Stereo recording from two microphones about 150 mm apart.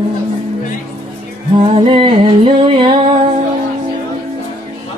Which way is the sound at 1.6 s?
35° right (ahead or behind).